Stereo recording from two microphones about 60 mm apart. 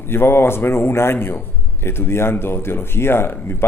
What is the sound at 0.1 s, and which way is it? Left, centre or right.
A man's voice, left.